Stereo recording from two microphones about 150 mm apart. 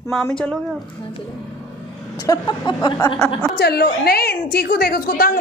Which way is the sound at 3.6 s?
90° left.